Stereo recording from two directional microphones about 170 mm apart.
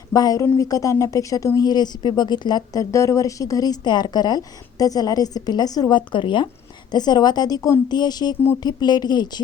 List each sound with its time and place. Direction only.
0.1 s a woman's voice: 20° left (ahead or behind)